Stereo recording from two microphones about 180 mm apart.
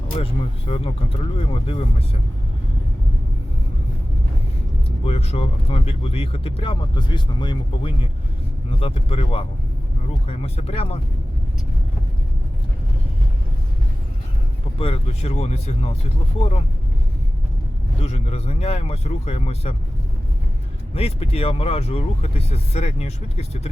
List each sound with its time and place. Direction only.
0.2 s speech: 30° left (ahead or behind)
5.0 s speech: 35° left (ahead or behind)
14.8 s speech: 30° left (ahead or behind)
18.0 s speech: 35° left (ahead or behind)
20.9 s speech: 35° left (ahead or behind)